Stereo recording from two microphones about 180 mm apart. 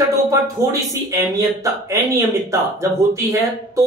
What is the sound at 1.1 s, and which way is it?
Speech, 15° right (ahead or behind).